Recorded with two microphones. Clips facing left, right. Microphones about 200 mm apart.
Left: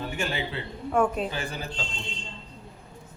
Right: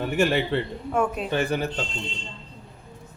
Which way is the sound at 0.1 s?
65° right (ahead or behind).